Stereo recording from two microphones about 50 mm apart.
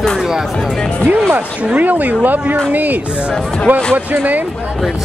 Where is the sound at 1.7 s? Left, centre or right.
Right.